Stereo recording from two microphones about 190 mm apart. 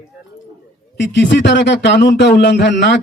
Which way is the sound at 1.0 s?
70° left (ahead or behind).